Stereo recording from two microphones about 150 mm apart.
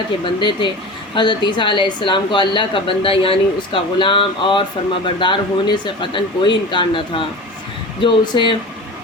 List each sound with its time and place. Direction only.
0.3 s a woman's voice: 30° left (ahead or behind)